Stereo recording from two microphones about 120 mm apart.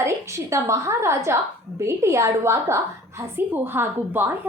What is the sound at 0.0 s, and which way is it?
A woman's voice, 25° right (ahead or behind).